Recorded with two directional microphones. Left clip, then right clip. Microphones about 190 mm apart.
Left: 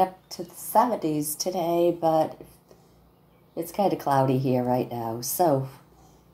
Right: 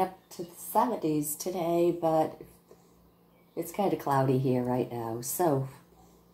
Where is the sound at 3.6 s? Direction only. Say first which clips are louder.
Left 5 dB; 15° left (ahead or behind).